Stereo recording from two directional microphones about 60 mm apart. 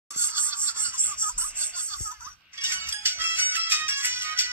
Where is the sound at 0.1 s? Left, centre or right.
Right.